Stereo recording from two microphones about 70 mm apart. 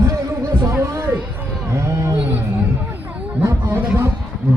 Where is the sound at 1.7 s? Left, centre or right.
Right.